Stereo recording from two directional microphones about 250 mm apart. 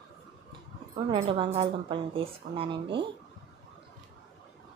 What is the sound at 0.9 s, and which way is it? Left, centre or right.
A woman's voice, right.